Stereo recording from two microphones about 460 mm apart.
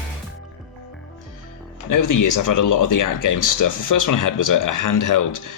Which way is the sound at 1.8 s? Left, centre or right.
Left.